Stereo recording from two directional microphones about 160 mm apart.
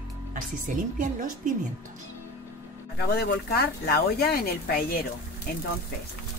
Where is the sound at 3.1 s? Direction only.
80° left.